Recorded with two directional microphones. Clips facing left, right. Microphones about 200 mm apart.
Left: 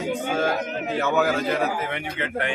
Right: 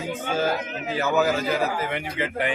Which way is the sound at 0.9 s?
Centre (ahead or behind).